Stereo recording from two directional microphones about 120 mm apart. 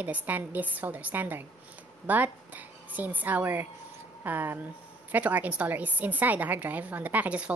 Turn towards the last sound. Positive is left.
turn(degrees=-10)  # may be behind; listen again after turning